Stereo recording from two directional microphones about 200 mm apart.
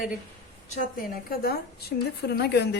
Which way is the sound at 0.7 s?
40° left (ahead or behind).